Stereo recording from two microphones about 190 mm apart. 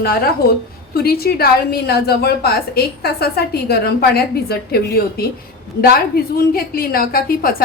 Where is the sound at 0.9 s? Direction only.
55° left (ahead or behind).